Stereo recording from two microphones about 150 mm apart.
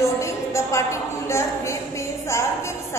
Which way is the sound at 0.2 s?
20° left (ahead or behind).